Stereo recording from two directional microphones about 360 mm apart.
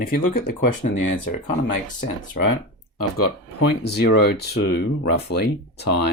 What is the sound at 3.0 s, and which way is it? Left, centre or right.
Speech, left.